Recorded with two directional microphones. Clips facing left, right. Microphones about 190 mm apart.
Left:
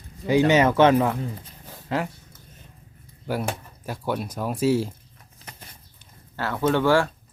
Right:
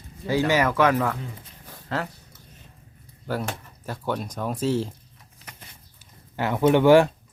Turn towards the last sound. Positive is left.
turn(degrees=-20)  # may be behind; listen again after turning